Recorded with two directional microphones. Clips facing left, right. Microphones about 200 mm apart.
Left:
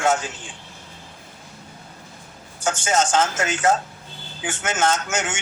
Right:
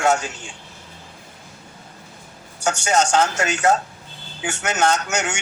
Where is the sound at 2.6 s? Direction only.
70° right (ahead or behind).